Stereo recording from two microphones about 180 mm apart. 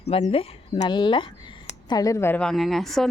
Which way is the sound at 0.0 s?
35° left (ahead or behind).